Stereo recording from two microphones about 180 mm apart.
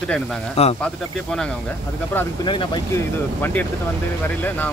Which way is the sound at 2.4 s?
25° left (ahead or behind).